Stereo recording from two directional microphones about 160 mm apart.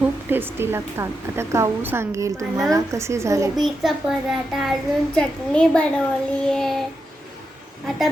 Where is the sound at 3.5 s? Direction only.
Centre (ahead or behind).